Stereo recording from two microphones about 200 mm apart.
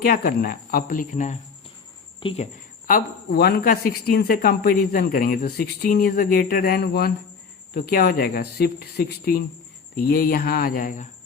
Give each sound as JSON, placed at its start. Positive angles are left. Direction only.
{"t": 0.0, "sound": "speech", "side_deg": 50}
{"t": 2.8, "sound": "speech", "side_deg": 45}